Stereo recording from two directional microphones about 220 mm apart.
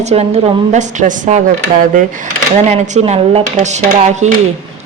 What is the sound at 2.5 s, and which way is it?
Speech, 30° right (ahead or behind).